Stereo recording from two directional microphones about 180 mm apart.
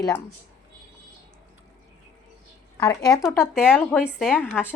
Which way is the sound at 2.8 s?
20° left (ahead or behind).